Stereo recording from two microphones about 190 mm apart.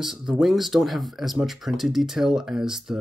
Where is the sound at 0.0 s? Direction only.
Centre (ahead or behind).